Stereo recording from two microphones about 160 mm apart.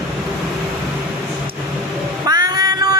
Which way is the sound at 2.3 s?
25° right (ahead or behind).